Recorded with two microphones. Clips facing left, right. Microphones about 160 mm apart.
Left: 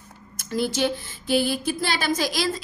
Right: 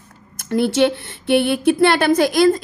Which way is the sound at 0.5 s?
65° right (ahead or behind).